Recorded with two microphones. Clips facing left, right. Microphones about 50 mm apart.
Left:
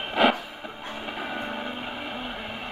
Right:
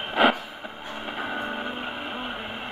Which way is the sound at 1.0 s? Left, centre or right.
Centre.